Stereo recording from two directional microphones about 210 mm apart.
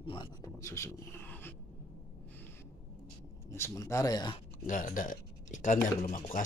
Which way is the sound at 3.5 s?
15° left (ahead or behind).